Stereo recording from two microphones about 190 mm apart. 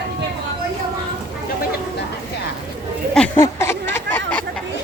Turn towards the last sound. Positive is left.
turn(degrees=5)  # may be behind; listen again after turning